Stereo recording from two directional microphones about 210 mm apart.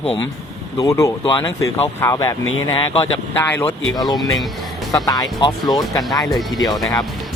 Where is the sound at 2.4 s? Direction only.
75° left (ahead or behind).